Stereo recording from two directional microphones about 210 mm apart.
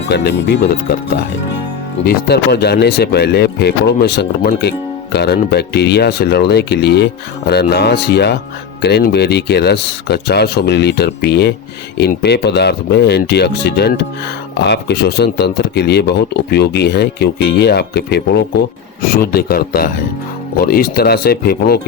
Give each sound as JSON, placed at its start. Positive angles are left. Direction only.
{"t": 0.1, "sound": "speech", "side_deg": 55}
{"t": 2.0, "sound": "speech", "side_deg": 50}